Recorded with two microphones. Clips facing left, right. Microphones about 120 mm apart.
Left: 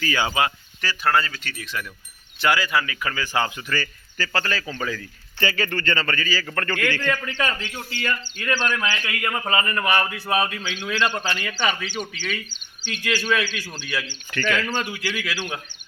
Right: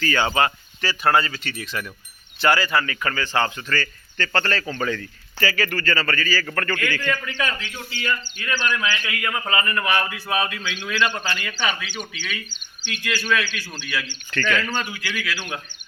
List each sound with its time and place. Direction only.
0.0 s speech: 10° left (ahead or behind)
0.8 s speech: 5° right (ahead or behind)
5.4 s a man's voice: 25° left (ahead or behind)
14.3 s speech: 15° left (ahead or behind)